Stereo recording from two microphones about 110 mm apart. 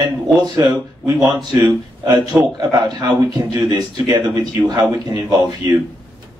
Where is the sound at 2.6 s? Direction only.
40° right (ahead or behind).